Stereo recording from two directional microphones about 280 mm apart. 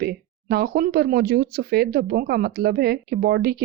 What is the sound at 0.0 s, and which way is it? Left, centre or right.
Speech, right.